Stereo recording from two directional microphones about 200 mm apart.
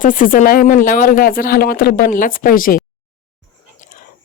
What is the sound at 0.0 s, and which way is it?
Speech, 45° left (ahead or behind).